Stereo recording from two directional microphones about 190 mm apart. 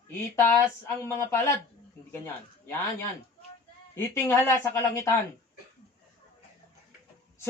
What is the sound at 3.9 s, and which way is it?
Speech, 15° left (ahead or behind).